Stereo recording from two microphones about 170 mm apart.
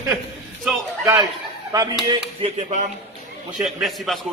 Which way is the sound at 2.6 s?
45° right (ahead or behind).